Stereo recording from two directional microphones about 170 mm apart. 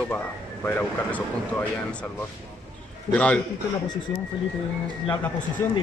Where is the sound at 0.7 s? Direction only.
10° left (ahead or behind).